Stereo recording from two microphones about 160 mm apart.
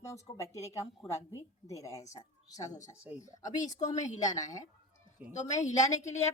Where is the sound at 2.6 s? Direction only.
50° left (ahead or behind).